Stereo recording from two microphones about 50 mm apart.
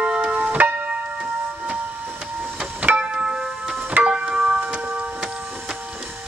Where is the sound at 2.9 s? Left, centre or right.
Right.